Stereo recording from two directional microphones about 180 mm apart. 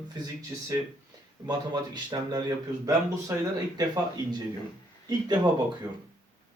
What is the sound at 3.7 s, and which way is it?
Speech, 20° right (ahead or behind).